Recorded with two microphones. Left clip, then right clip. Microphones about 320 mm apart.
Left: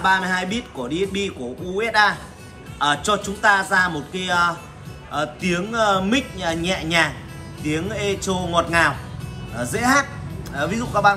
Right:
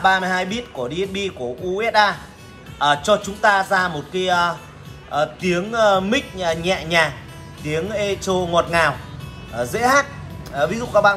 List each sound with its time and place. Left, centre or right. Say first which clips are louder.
0.0 s speech: right 2 dB; centre